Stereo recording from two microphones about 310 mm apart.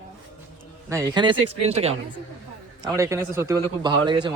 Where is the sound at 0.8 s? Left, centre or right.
Centre.